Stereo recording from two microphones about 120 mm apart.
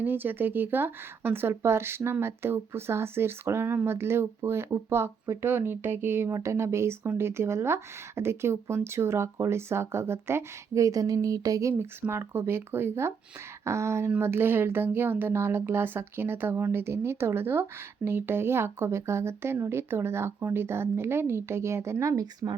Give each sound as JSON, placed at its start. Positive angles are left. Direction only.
{"t": 0.0, "sound": "speech", "side_deg": -15}